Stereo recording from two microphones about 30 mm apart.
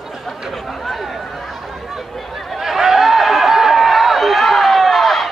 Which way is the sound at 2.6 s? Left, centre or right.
Centre.